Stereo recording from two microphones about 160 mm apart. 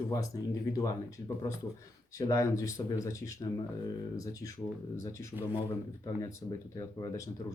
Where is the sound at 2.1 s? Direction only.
20° left (ahead or behind).